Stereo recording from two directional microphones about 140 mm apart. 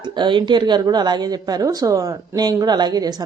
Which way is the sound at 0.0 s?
35° right (ahead or behind).